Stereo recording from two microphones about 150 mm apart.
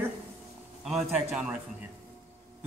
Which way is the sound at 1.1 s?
10° right (ahead or behind).